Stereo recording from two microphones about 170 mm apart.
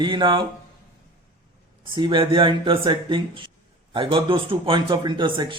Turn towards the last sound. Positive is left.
turn(degrees=-30)  # may be behind; listen again after turning